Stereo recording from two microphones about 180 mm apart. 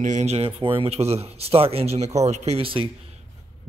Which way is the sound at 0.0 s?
40° right (ahead or behind).